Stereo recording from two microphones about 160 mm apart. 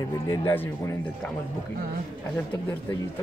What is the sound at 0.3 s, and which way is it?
Speech, 15° left (ahead or behind).